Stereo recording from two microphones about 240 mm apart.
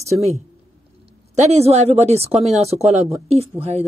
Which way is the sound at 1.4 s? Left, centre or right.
Right.